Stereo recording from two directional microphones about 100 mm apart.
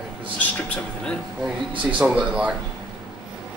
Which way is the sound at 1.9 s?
10° right (ahead or behind).